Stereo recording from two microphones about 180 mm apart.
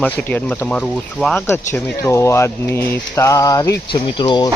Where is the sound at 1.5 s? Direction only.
15° left (ahead or behind).